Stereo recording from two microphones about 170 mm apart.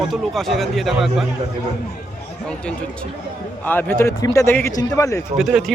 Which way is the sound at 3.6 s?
10° left (ahead or behind).